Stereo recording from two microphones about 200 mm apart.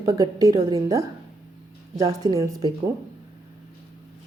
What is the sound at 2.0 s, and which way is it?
Speech, 20° right (ahead or behind).